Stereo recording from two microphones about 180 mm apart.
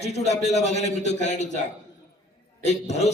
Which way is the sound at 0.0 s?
35° left (ahead or behind).